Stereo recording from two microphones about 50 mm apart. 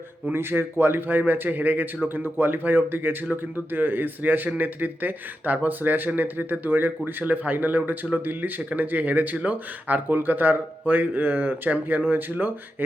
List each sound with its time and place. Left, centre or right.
0.3 s speech: right